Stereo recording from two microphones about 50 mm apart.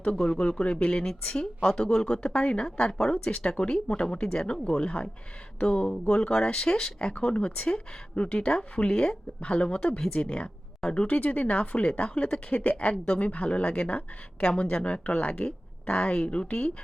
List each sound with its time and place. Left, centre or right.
0.2 s a woman's voice: centre; by 12.7 s left
12.7 s speech: centre